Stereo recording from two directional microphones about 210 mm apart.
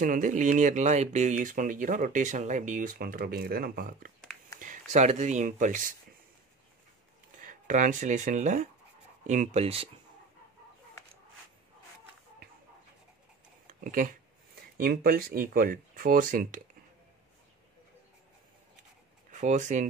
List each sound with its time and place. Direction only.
0.0 s speech: 40° right (ahead or behind)
7.3 s speech: 35° right (ahead or behind)
13.7 s speech: 40° right (ahead or behind)
19.3 s speech: 35° right (ahead or behind)